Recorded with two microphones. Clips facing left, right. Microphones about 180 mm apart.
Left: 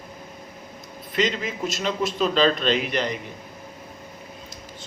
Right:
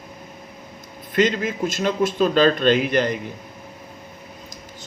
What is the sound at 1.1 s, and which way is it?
A man's voice, 50° right (ahead or behind).